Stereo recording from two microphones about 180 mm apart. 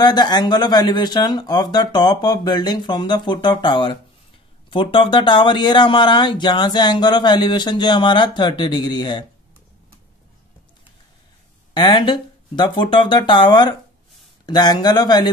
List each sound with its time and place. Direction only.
0.0 s speech: 25° left (ahead or behind)
11.7 s speech: 25° left (ahead or behind)